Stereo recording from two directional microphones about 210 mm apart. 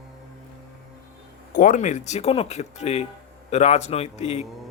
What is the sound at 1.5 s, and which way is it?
Speech, 40° left (ahead or behind).